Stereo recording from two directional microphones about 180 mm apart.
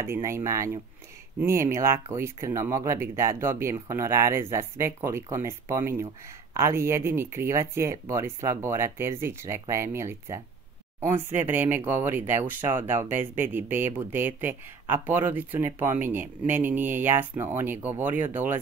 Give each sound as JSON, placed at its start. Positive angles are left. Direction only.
{"t": 0.0, "sound": "speech", "side_deg": -15}